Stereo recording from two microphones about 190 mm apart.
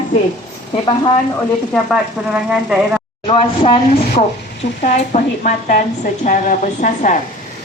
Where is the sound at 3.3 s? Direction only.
30° left (ahead or behind).